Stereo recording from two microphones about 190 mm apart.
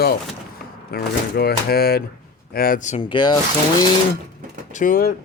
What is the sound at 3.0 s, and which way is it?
Speech, 25° left (ahead or behind).